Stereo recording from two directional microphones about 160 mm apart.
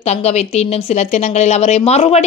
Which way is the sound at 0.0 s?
45° left (ahead or behind).